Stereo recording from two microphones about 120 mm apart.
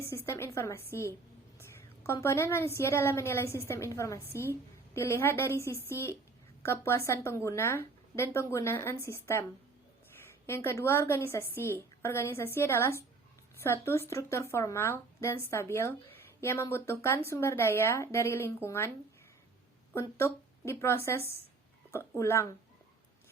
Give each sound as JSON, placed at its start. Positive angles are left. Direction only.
{"t": 0.0, "sound": "a woman's voice", "side_deg": 25}
{"t": 2.2, "sound": "a woman's voice", "side_deg": 20}
{"t": 19.9, "sound": "a woman's voice", "side_deg": 20}